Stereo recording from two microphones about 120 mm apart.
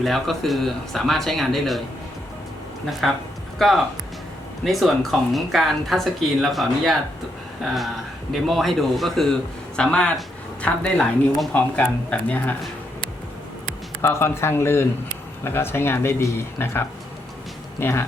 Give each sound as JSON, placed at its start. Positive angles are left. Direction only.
{"t": 0.0, "sound": "a man's voice", "side_deg": 0}
{"t": 3.0, "sound": "a man's voice", "side_deg": 0}
{"t": 14.0, "sound": "speech", "side_deg": 20}